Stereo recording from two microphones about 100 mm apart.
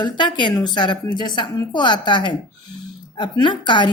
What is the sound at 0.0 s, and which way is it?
Speech, 50° left (ahead or behind).